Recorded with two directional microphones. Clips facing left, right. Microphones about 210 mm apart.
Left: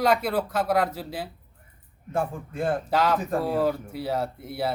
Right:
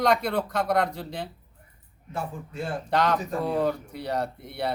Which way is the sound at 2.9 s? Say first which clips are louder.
Right 2 dB; 5° left (ahead or behind).